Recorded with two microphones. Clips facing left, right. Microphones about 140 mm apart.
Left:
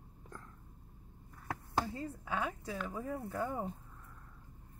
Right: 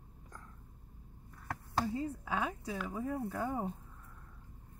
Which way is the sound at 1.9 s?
20° right (ahead or behind).